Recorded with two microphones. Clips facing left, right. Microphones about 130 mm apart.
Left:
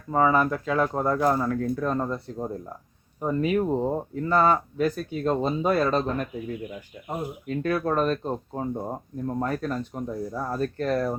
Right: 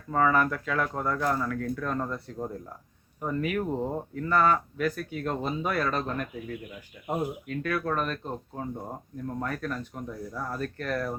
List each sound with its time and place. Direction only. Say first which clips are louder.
0.1 s speech: left 3 dB; 20° left (ahead or behind)
7.4 s speech: left 4 dB; 30° left (ahead or behind)